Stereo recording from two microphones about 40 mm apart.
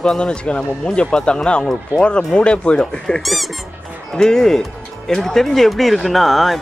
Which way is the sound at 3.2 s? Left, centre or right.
Centre.